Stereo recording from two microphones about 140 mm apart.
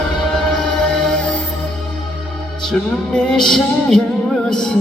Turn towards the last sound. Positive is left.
turn(degrees=5)  # may be behind; listen again after turning